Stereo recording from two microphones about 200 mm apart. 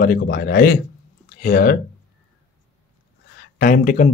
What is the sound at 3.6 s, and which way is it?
Speech, 40° left (ahead or behind).